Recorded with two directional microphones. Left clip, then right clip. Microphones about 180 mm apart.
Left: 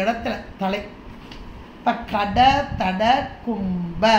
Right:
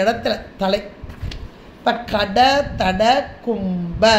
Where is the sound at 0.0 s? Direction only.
55° right (ahead or behind).